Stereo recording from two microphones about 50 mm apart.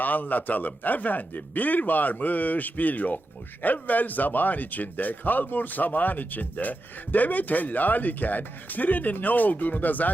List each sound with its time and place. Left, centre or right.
0.0 s speech: left